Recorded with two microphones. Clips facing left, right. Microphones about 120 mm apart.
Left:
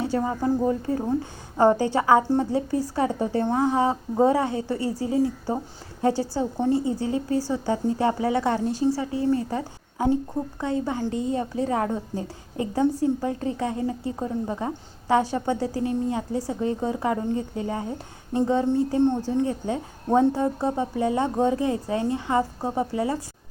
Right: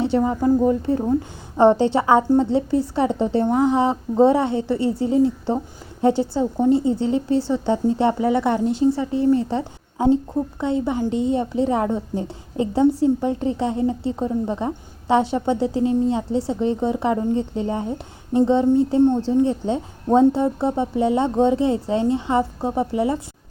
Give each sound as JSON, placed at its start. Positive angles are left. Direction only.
{"t": 0.0, "sound": "a woman's voice", "side_deg": -20}